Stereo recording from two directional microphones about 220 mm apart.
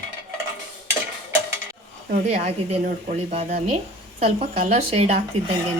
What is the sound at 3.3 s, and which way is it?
Speech, 25° right (ahead or behind).